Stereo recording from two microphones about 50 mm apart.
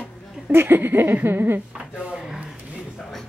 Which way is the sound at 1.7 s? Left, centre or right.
Centre.